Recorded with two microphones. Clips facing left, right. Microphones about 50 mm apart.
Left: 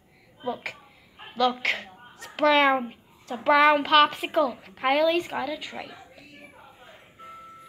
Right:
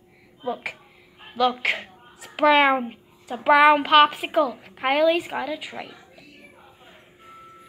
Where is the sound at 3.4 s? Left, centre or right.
Centre.